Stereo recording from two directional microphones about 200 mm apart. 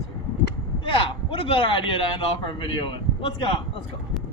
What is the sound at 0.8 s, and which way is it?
A man's voice, 25° left (ahead or behind).